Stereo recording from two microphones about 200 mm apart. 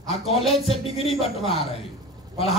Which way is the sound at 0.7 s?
30° left (ahead or behind).